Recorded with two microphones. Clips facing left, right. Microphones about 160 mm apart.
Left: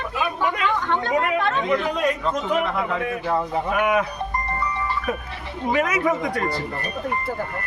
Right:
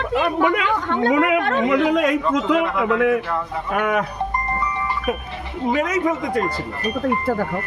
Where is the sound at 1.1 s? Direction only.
90° right.